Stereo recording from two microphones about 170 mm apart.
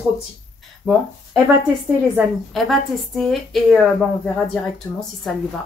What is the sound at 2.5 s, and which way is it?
Speech, centre (ahead or behind).